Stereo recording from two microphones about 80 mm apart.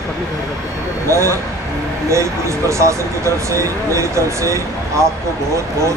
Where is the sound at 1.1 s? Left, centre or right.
Right.